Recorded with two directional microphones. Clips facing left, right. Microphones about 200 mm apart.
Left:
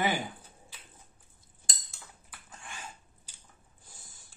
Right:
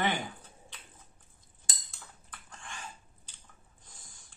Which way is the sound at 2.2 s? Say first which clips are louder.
Even; 10° left (ahead or behind).